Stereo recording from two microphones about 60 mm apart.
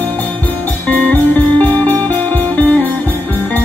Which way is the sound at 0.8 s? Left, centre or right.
Left.